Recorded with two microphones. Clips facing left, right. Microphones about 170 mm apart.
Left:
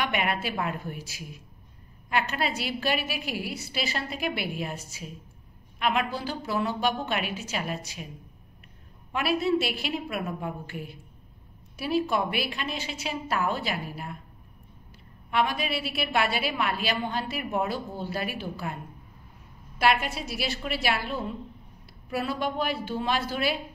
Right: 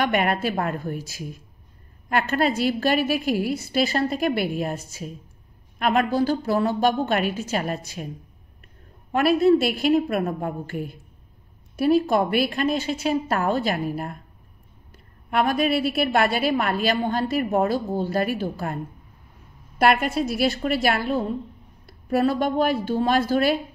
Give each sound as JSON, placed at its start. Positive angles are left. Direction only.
{"t": 0.0, "sound": "a woman's voice", "side_deg": -45}
{"t": 9.1, "sound": "a woman's voice", "side_deg": -45}
{"t": 15.3, "sound": "a woman's voice", "side_deg": -50}
{"t": 19.8, "sound": "a woman's voice", "side_deg": -50}